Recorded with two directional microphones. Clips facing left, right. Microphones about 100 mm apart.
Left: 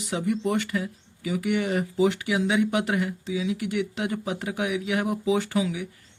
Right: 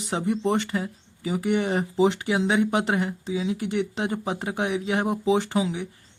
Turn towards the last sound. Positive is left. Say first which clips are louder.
# right 1 dB
turn(degrees=-25)  # may be behind; listen again after turning